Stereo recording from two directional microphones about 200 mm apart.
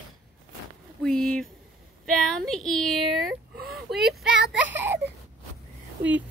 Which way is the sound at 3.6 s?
50° right (ahead or behind).